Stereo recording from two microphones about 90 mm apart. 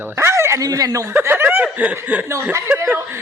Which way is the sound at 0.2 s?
30° right (ahead or behind).